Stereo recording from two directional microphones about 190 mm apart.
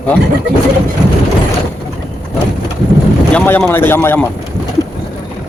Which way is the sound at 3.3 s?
10° left (ahead or behind).